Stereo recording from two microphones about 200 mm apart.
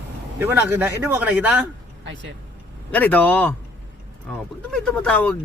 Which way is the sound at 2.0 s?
60° right (ahead or behind).